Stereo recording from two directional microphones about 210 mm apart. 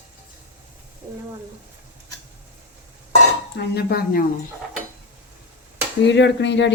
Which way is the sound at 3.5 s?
50° left (ahead or behind).